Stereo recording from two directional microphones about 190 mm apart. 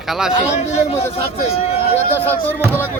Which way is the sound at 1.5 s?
30° left (ahead or behind).